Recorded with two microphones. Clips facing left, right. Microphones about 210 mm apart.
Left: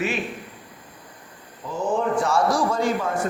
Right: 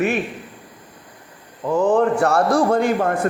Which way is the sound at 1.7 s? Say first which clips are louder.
Right 7 dB; 65° right (ahead or behind).